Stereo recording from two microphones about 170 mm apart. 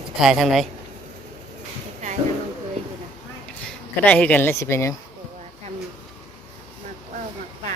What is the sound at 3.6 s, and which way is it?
Speech, 10° left (ahead or behind).